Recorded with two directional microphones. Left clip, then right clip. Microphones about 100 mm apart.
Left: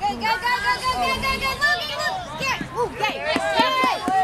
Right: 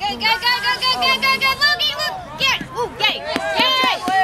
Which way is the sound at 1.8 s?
5° right (ahead or behind).